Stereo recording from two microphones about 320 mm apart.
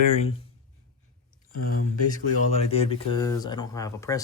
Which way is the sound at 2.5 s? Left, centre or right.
Centre.